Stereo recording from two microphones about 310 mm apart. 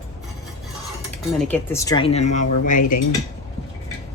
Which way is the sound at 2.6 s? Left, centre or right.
Left.